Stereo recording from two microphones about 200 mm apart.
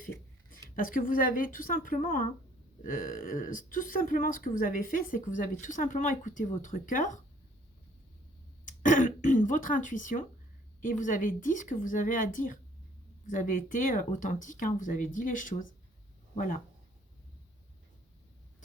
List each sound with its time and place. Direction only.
0.8 s speech: 45° left (ahead or behind)
8.6 s throat clearing: 40° left (ahead or behind)
10.8 s speech: 40° left (ahead or behind)